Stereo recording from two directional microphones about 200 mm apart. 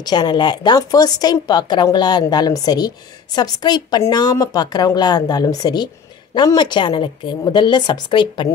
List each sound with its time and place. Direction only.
0.0 s a woman's voice: 20° left (ahead or behind)